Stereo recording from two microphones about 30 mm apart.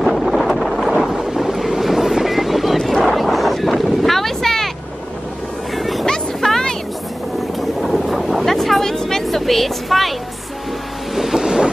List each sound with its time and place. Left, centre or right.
0.0 s wind noise: centre
1.4 s waves: centre
2.2 s boat: centre
2.8 s a sound: centre
3.2 s wind noise: centre
5.8 s boat: centre
6.4 s vehicle: centre
7.8 s boat: centre
8.5 s vehicle: centre
9.2 s a sound: centre
11.3 s wind noise: right